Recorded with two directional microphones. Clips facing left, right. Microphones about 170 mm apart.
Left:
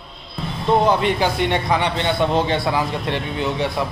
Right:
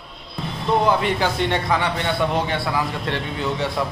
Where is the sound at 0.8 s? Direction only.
20° left (ahead or behind).